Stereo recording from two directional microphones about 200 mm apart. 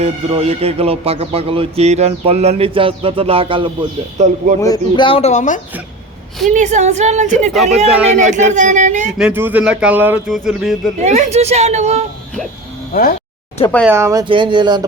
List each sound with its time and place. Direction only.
0.0 s speech: 30° right (ahead or behind)
4.2 s speech: 35° right (ahead or behind)
4.6 s speech: 20° left (ahead or behind); by 5.5 s 35° left (ahead or behind)
6.5 s speech: 35° right (ahead or behind)
9.1 s speech: 5° right (ahead or behind)
10.2 s a sound: centre (ahead or behind)
11.0 s speech: 35° right (ahead or behind)
12.9 s speech: 45° left (ahead or behind)
13.6 s speech: 5° left (ahead or behind)
13.8 s speech: 15° right (ahead or behind)